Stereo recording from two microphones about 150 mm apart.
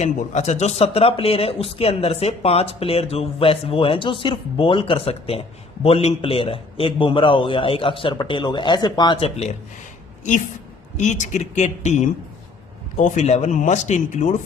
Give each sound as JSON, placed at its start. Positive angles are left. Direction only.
{"t": 0.0, "sound": "speech", "side_deg": 50}
{"t": 10.9, "sound": "speech", "side_deg": 55}